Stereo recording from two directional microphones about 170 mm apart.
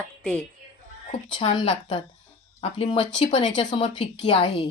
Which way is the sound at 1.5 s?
30° left (ahead or behind).